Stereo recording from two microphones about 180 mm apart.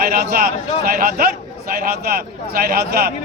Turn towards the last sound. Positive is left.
turn(degrees=-55)  # may be behind; listen again after turning